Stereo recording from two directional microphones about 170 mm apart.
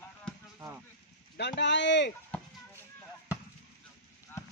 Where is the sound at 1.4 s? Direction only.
90° left.